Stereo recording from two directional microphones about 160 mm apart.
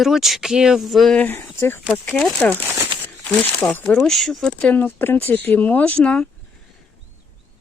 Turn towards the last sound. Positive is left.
turn(degrees=5)  # may be behind; listen again after turning